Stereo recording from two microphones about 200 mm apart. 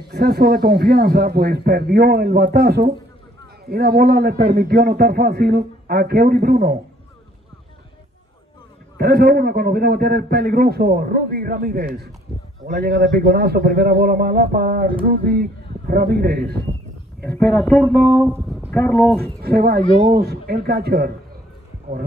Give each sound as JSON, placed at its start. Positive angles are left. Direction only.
{"t": 0.1, "sound": "a man's voice", "side_deg": -50}
{"t": 8.9, "sound": "a man's voice", "side_deg": -50}
{"t": 17.3, "sound": "speech", "side_deg": 5}
{"t": 18.2, "sound": "speech", "side_deg": -10}
{"t": 18.8, "sound": "speech", "side_deg": 5}
{"t": 19.4, "sound": "a man's voice", "side_deg": -50}